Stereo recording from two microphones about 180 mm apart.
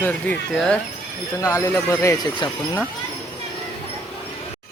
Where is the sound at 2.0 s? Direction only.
20° left (ahead or behind).